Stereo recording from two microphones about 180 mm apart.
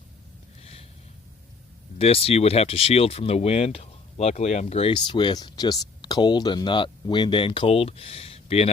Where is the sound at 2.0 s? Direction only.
35° left (ahead or behind).